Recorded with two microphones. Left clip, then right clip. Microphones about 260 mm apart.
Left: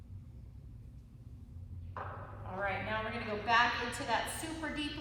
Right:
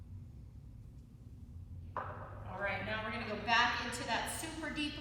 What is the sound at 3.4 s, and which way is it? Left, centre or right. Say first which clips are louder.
Speech: left 2 dB; centre.